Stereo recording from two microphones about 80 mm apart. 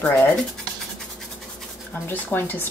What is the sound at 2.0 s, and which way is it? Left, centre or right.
Speech, left.